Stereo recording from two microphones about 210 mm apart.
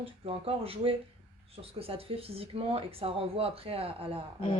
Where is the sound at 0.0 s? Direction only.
25° right (ahead or behind).